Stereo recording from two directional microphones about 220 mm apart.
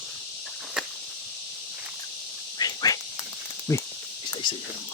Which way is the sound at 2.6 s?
15° left (ahead or behind).